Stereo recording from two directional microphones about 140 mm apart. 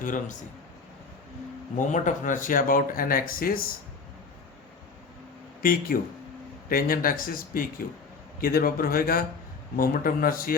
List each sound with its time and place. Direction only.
0.0 s a man's voice: 70° left (ahead or behind)
1.8 s speech: 65° left (ahead or behind); by 3.6 s 90° left
5.9 s speech: 90° left